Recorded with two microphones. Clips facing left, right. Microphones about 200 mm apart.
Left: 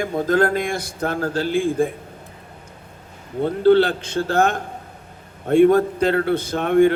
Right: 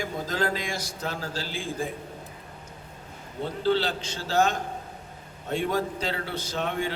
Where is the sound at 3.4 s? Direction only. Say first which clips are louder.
Left 11 dB; 55° left (ahead or behind).